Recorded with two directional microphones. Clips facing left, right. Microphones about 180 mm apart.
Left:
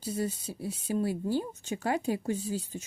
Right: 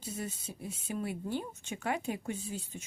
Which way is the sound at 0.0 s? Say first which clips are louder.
Left 7 dB; 35° left (ahead or behind).